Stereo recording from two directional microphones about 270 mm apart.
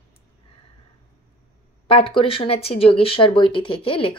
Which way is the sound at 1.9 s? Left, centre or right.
Centre.